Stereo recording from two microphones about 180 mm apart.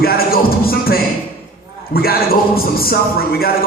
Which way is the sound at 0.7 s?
55° left (ahead or behind).